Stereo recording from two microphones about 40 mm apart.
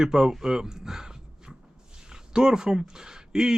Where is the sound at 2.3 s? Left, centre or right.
Centre.